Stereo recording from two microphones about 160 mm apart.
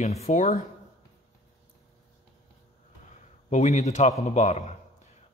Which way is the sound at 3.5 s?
45° left (ahead or behind).